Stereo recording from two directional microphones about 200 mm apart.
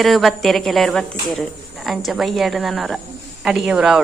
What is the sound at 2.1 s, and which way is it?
A woman's voice, centre (ahead or behind).